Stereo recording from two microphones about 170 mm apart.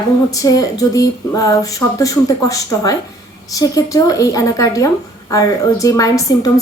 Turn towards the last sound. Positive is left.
turn(degrees=20)  # may be behind; listen again after turning